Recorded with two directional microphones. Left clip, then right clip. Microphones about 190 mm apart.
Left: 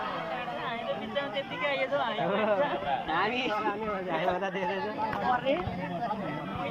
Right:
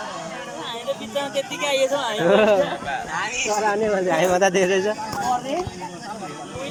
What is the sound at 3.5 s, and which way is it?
Speech, 55° right (ahead or behind).